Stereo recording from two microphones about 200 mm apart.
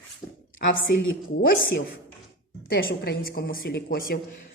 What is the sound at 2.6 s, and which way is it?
A woman's voice, 50° left (ahead or behind).